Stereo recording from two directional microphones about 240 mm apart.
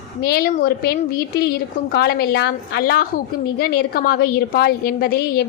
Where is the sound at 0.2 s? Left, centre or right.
Left.